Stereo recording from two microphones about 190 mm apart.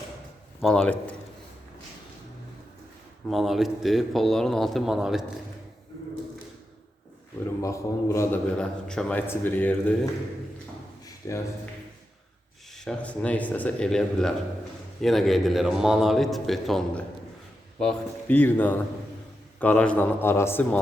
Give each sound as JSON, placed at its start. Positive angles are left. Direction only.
{"t": 0.6, "sound": "a man's voice", "side_deg": 5}
{"t": 3.2, "sound": "a man's voice", "side_deg": 0}
{"t": 7.6, "sound": "a man's voice", "side_deg": 15}
{"t": 11.2, "sound": "a man's voice", "side_deg": 15}
{"t": 12.7, "sound": "a man's voice", "side_deg": 5}